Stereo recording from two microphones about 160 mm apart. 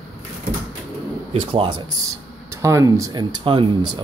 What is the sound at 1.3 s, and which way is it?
Speech, 35° right (ahead or behind).